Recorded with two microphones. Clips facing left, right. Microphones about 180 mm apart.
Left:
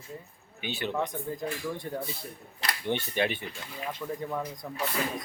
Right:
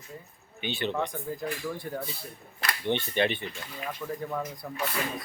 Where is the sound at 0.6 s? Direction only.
10° left (ahead or behind).